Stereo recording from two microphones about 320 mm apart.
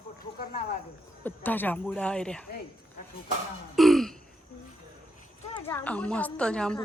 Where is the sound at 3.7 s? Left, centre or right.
Centre.